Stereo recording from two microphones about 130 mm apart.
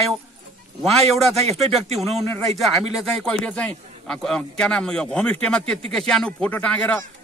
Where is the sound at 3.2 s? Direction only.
5° left (ahead or behind).